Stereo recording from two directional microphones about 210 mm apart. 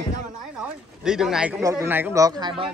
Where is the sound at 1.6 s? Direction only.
15° right (ahead or behind).